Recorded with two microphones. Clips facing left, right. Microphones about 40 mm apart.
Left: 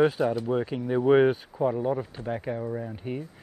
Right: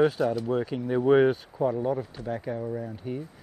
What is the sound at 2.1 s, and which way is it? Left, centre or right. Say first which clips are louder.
Speech: left 1 dB; left.